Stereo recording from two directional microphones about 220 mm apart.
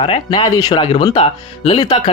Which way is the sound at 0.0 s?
20° left (ahead or behind).